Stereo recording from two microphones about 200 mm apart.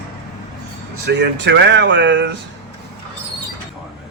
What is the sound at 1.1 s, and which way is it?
Speech, 60° right (ahead or behind).